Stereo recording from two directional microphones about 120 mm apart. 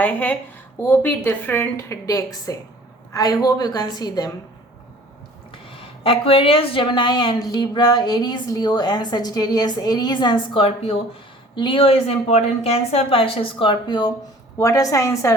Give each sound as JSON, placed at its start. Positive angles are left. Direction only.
{"t": 0.0, "sound": "a woman's voice", "side_deg": 15}
{"t": 6.0, "sound": "a woman's voice", "side_deg": 50}